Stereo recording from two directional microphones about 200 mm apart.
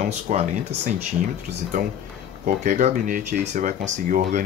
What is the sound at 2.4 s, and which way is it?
Speech, 40° right (ahead or behind).